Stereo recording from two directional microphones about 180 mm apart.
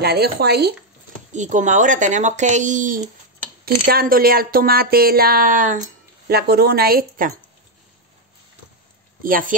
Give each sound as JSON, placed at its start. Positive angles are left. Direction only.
{"t": 0.0, "sound": "speech", "side_deg": -60}
{"t": 1.3, "sound": "speech", "side_deg": -45}
{"t": 3.6, "sound": "speech", "side_deg": -55}
{"t": 6.2, "sound": "speech", "side_deg": -60}
{"t": 9.2, "sound": "speech", "side_deg": -50}